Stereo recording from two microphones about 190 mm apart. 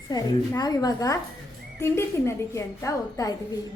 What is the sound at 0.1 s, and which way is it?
Speech, 20° left (ahead or behind).